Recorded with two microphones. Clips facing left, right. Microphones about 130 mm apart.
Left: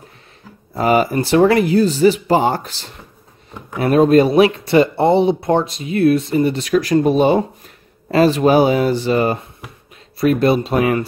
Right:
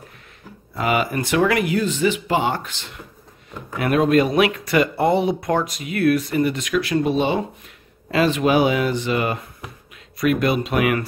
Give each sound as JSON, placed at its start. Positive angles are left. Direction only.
{"t": 0.7, "sound": "speech", "side_deg": 35}